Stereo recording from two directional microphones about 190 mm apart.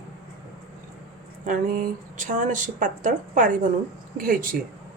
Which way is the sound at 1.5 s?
45° right (ahead or behind).